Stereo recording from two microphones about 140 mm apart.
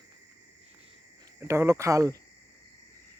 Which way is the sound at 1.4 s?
20° right (ahead or behind).